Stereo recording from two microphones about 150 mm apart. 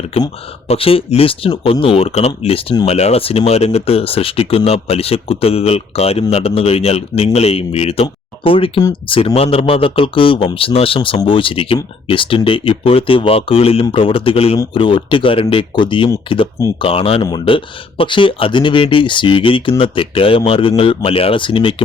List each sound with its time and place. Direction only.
0.1 s speech: 45° left (ahead or behind)